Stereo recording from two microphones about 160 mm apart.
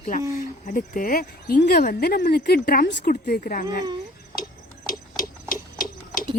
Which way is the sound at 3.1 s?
60° left (ahead or behind).